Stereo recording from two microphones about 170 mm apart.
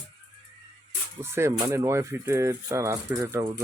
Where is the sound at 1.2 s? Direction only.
15° right (ahead or behind).